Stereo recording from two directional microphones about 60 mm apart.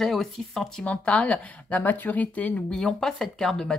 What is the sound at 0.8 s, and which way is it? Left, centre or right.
Speech, left.